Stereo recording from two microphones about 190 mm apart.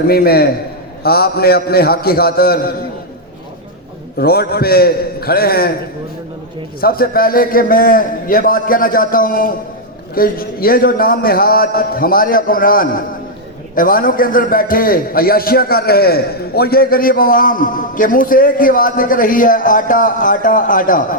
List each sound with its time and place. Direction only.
0.1 s a man's voice: 55° left (ahead or behind)
4.2 s a man's voice: 55° left (ahead or behind)
6.8 s a man's voice: 50° left (ahead or behind)